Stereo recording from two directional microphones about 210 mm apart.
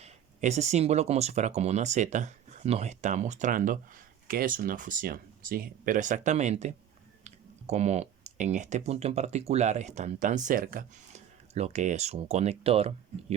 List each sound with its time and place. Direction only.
0.0 s speech: 35° right (ahead or behind)